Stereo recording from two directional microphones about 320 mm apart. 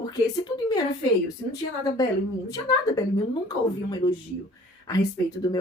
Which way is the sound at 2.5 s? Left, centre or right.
Centre.